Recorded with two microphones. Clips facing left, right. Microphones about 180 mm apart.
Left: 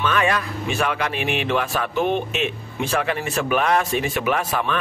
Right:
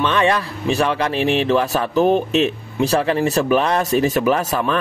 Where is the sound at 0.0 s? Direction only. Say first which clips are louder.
Right 4 dB; 30° right (ahead or behind).